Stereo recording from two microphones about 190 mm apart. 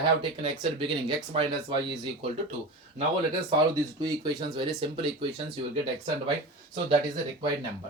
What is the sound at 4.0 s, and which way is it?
Speech, 25° right (ahead or behind).